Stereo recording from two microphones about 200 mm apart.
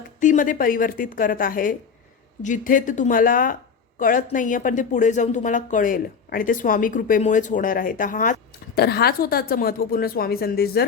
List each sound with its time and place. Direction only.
0.2 s a woman's voice: 40° left (ahead or behind)